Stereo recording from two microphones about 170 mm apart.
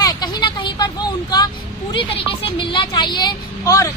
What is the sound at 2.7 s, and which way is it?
Speech, 25° left (ahead or behind).